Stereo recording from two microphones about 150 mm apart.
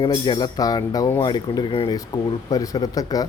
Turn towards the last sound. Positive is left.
turn(degrees=25)  # may be behind; listen again after turning